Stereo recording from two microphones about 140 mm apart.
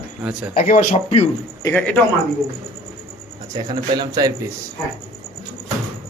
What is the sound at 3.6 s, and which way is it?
Speech, 30° right (ahead or behind).